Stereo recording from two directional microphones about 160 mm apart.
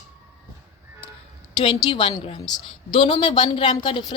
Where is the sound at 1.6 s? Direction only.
30° left (ahead or behind).